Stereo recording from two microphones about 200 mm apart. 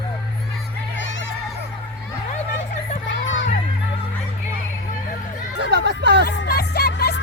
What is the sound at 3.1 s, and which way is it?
Crowd, 70° left (ahead or behind).